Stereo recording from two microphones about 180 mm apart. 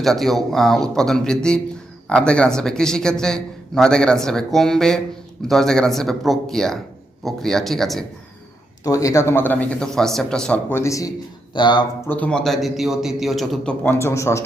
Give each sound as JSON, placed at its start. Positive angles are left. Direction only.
{"t": 0.0, "sound": "speech", "side_deg": 0}
{"t": 8.8, "sound": "a man's voice", "side_deg": 20}
{"t": 12.0, "sound": "speech", "side_deg": 10}
{"t": 13.8, "sound": "a man's voice", "side_deg": 15}